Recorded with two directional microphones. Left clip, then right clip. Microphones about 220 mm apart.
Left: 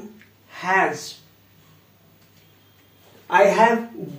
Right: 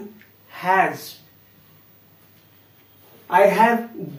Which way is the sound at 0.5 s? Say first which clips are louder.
Right 3 dB; 20° right (ahead or behind).